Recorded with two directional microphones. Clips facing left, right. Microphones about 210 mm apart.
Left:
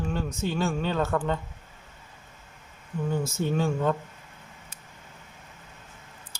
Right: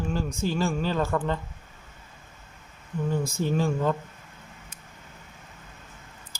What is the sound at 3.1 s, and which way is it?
Speech, 5° left (ahead or behind).